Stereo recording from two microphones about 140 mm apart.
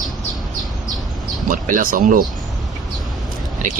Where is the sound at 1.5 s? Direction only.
75° right (ahead or behind).